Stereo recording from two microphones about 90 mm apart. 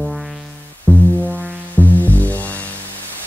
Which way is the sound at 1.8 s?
20° left (ahead or behind).